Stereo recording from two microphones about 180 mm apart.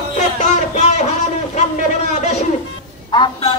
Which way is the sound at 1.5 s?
40° left (ahead or behind).